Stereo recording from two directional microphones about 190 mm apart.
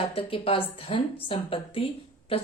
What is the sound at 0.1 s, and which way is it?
Speech, 30° left (ahead or behind).